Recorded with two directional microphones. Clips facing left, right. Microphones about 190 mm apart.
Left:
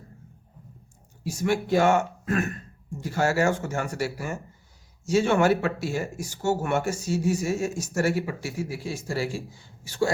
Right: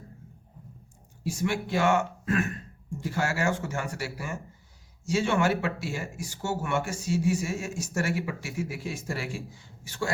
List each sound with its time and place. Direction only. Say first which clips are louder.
1.5 s speech: left 5 dB; 40° left (ahead or behind)
3.2 s speech: left 5 dB; 40° left (ahead or behind)